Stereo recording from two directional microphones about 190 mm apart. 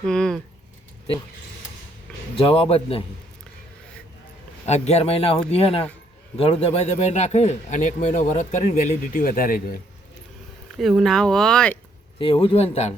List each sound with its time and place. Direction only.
0.0 s speech: 5° left (ahead or behind)
2.3 s speech: 30° left (ahead or behind)
4.6 s speech: 35° left (ahead or behind)
10.8 s speech: centre (ahead or behind)
12.2 s speech: 30° left (ahead or behind)